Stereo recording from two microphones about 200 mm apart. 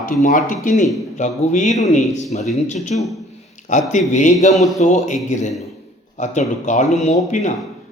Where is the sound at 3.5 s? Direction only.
40° left (ahead or behind).